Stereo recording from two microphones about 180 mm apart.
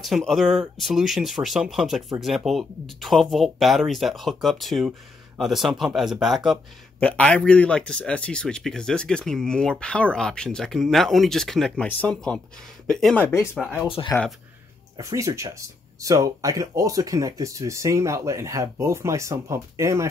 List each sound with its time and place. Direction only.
0.0 s speech: centre (ahead or behind)
13.8 s speech: 30° left (ahead or behind)
15.0 s speech: 15° right (ahead or behind)